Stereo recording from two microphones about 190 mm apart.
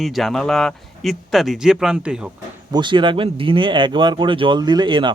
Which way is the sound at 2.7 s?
25° right (ahead or behind).